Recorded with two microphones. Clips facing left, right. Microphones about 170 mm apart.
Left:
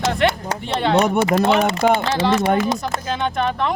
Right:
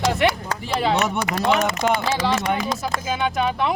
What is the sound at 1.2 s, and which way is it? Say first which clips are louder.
Speech: left 4 dB; 30° left (ahead or behind).